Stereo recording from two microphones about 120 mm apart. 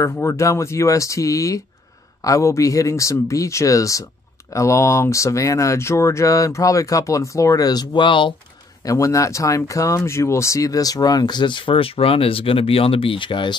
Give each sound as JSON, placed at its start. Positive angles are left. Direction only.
{"t": 0.0, "sound": "speech", "side_deg": 25}
{"t": 8.8, "sound": "speech", "side_deg": 25}